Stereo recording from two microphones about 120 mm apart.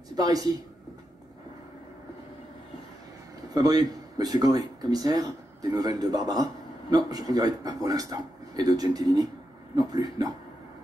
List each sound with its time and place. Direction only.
0.1 s speech: 30° right (ahead or behind)
3.5 s speech: 30° right (ahead or behind)